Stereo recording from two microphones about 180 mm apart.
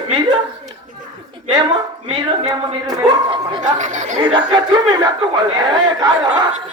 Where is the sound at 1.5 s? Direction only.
20° right (ahead or behind).